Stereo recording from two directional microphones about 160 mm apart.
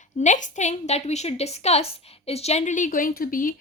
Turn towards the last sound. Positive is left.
turn(degrees=60)  # may be behind; listen again after turning